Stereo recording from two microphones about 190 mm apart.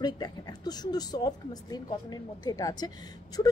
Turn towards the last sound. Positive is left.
turn(degrees=25)  # may be behind; listen again after turning